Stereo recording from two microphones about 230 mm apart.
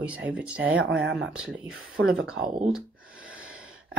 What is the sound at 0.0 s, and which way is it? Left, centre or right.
Speech, centre.